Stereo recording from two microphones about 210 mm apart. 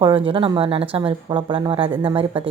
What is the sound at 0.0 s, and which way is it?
A woman's voice, 25° right (ahead or behind).